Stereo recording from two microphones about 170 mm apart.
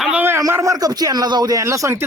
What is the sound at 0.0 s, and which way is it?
Speech, 10° right (ahead or behind).